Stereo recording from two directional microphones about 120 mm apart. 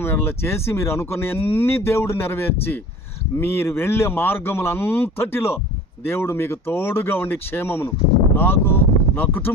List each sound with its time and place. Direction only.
0.0 s speech: 20° left (ahead or behind)